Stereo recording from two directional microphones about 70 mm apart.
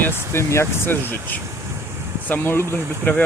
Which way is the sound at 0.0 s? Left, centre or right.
Left.